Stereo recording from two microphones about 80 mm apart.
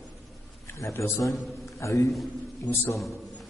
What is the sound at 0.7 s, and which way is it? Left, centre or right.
A man's voice, left.